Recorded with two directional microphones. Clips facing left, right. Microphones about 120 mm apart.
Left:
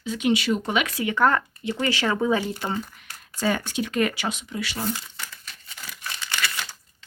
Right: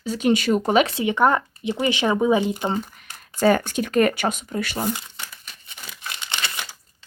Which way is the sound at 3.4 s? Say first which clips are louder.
Right 6 dB; 50° right (ahead or behind).